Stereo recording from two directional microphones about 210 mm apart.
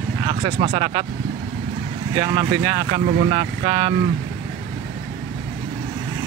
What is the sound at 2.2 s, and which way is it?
Speech, 20° right (ahead or behind).